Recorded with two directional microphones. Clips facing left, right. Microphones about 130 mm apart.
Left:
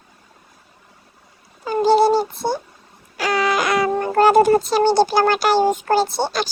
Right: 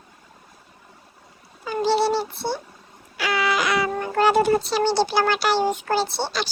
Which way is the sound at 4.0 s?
45° left (ahead or behind).